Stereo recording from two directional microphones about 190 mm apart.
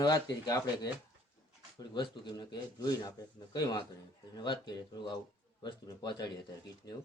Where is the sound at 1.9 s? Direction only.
25° left (ahead or behind).